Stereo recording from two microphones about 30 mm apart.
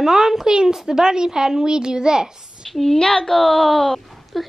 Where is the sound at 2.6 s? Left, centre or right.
Centre.